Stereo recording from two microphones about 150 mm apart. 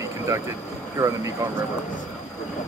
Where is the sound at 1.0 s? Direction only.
20° right (ahead or behind).